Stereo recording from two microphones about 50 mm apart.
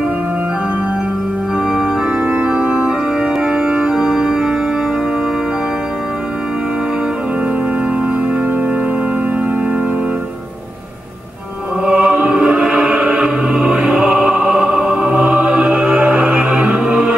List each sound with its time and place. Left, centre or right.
2.1 s organ: right
2.7 s organ: centre
11.8 s music: centre
12.4 s choir: centre
13.2 s music: centre